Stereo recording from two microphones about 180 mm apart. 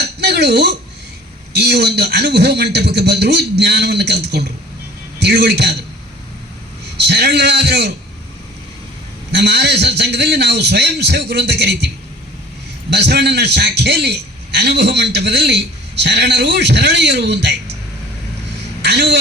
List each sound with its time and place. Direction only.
0.0 s dishes: 65° right (ahead or behind)
1.5 s a man's voice: 65° right (ahead or behind)
6.9 s a man's voice: 65° right (ahead or behind)
9.3 s a man's voice: 65° right (ahead or behind)
12.9 s a man's voice: 70° right (ahead or behind)
18.8 s speech: 70° right (ahead or behind)